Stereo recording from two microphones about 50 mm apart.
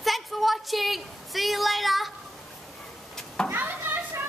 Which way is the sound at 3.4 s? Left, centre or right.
Right.